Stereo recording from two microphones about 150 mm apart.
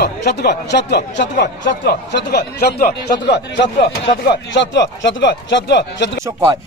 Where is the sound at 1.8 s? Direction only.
90° left.